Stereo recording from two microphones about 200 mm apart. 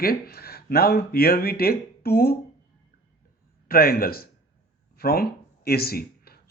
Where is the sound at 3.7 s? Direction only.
45° left (ahead or behind).